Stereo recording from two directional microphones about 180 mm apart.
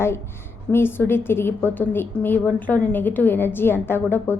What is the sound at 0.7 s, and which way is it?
A woman's voice, 10° left (ahead or behind).